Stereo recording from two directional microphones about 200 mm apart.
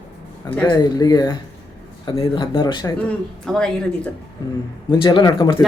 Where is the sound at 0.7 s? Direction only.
20° left (ahead or behind).